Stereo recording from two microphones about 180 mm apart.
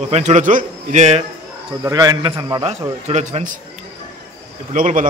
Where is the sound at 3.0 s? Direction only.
40° right (ahead or behind).